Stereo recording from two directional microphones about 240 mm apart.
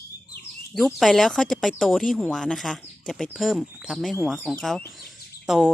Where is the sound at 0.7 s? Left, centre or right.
Centre.